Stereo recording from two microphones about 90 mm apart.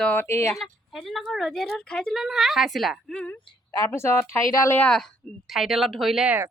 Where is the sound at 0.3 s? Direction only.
30° left (ahead or behind).